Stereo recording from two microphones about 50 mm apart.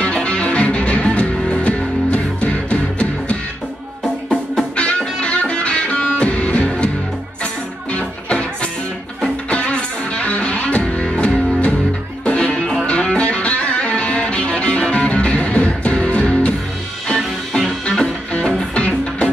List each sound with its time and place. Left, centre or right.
0.0 s music: left
4.7 s music: left
7.9 s music: left
9.5 s music: left